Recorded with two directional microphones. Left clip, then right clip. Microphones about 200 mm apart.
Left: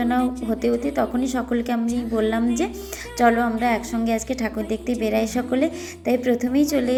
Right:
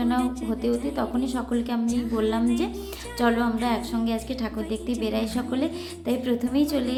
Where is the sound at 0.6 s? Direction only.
20° left (ahead or behind).